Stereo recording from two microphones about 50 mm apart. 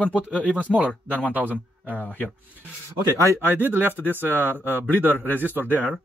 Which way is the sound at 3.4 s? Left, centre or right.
Right.